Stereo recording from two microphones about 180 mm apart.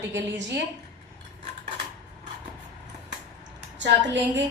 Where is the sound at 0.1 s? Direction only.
75° right (ahead or behind).